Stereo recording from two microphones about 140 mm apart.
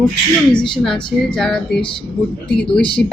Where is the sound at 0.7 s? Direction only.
5° left (ahead or behind).